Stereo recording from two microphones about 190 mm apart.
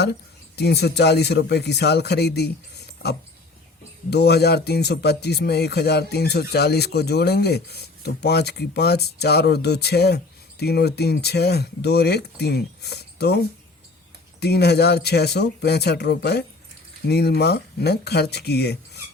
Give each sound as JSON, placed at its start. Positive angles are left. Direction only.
{"t": 0.0, "sound": "speech", "side_deg": 60}
{"t": 4.1, "sound": "speech", "side_deg": 60}
{"t": 14.4, "sound": "speech", "side_deg": 60}